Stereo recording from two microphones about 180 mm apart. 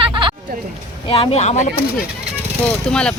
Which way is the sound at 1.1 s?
30° left (ahead or behind).